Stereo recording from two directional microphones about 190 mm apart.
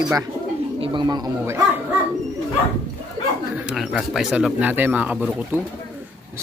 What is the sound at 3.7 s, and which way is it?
Speech, centre (ahead or behind).